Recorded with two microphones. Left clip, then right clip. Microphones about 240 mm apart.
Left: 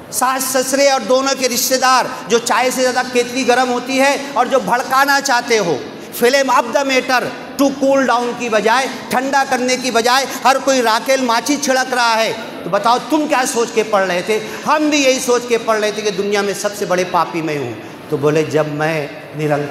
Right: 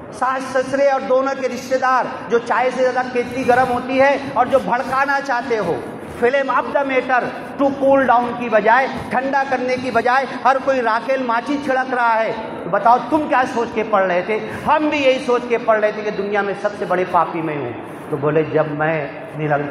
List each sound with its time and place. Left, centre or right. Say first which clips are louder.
0.2 s a man's voice: left 3 dB; left